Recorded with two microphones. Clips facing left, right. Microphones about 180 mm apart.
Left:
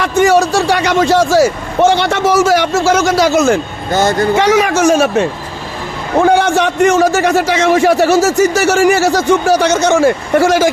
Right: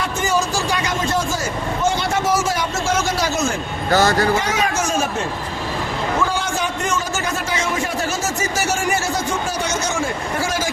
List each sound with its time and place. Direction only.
0.0 s a man's voice: 75° left (ahead or behind)
3.9 s speech: 20° left (ahead or behind)
4.4 s a man's voice: 80° left